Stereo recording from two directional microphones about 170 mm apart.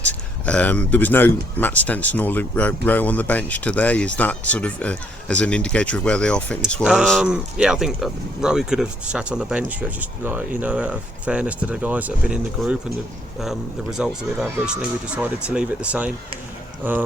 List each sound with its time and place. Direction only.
0.0 s speech: 10° left (ahead or behind); by 17.0 s 10° right (ahead or behind)